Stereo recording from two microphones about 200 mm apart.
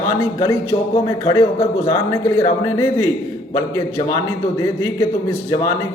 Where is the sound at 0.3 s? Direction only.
15° left (ahead or behind).